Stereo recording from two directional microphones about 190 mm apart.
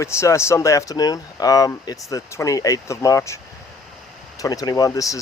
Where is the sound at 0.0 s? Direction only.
15° left (ahead or behind).